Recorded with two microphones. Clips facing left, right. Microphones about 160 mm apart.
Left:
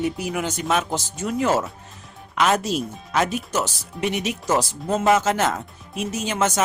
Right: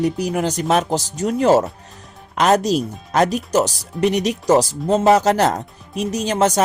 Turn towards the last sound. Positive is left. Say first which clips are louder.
# right 5 dB
turn(degrees=-35)  # may be behind; listen again after turning